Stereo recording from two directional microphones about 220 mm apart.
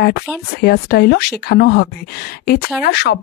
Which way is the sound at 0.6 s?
45° left (ahead or behind).